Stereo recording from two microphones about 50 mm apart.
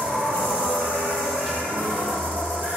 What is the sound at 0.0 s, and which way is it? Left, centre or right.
Train, centre.